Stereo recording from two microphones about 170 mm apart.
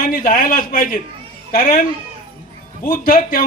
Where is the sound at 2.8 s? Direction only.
55° left (ahead or behind).